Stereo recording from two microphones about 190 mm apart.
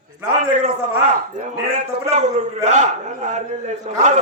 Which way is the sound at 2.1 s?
40° right (ahead or behind).